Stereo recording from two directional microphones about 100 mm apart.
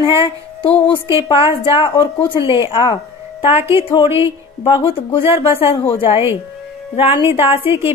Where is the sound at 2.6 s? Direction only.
60° left (ahead or behind).